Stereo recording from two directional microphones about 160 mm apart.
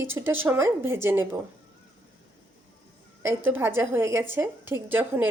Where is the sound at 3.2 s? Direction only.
15° right (ahead or behind).